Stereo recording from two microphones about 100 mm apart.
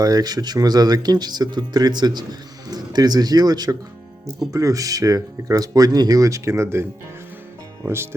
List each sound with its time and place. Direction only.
0.0 s speech: 40° right (ahead or behind)
7.9 s speech: 25° right (ahead or behind)